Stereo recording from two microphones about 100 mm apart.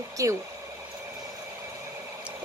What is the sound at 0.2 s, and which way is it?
Speech, 35° right (ahead or behind).